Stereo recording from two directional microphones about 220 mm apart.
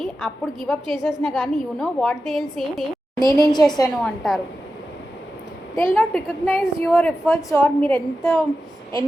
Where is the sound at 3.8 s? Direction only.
Centre (ahead or behind).